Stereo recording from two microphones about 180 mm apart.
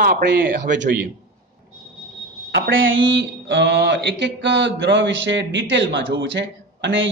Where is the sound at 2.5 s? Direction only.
90° right.